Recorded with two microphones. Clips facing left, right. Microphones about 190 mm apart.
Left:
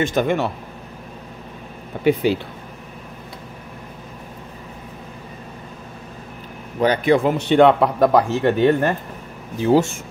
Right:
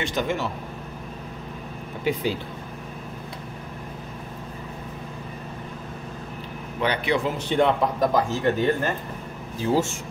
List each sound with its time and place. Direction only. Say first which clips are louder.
0.0 s a man's voice: left 7 dB; 55° left (ahead or behind)
2.1 s speech: left 8 dB; 65° left (ahead or behind)
6.8 s a man's voice: left 8 dB; 45° left (ahead or behind)
7.3 s speech: left 7 dB; 70° left (ahead or behind)